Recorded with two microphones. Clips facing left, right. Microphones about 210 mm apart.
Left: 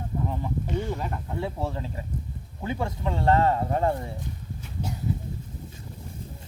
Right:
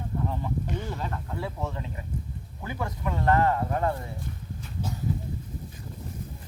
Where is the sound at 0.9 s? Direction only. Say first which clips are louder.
Left 2 dB; 15° left (ahead or behind).